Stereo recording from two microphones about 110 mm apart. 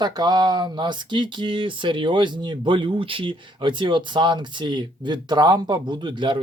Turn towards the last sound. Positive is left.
turn(degrees=-45)  # may be behind; listen again after turning